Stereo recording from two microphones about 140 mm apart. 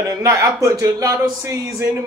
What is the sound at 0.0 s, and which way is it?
Speech, 25° right (ahead or behind).